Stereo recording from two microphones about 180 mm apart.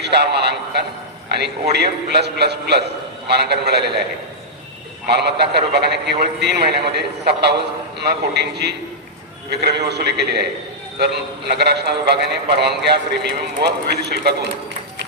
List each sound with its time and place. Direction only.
0.0 s a man's voice: 65° right (ahead or behind)
1.7 s a man's voice: 65° right (ahead or behind)
5.0 s a man's voice: 65° right (ahead or behind)